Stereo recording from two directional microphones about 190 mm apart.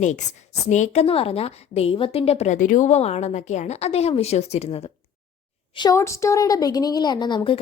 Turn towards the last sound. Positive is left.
turn(degrees=25)  # may be behind; listen again after turning